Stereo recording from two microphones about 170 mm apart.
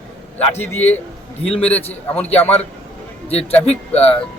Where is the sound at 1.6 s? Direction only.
10° left (ahead or behind).